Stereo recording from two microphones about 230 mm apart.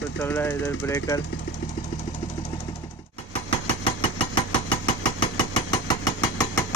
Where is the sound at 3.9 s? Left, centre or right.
Left.